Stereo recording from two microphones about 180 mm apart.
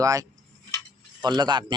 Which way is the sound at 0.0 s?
20° right (ahead or behind).